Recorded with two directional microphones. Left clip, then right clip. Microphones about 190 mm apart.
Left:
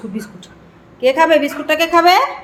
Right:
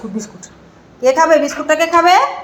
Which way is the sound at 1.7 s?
10° left (ahead or behind).